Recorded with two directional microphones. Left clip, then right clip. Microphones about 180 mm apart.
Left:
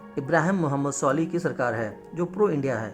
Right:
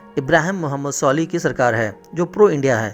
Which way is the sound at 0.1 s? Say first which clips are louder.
Right 7 dB; 25° right (ahead or behind).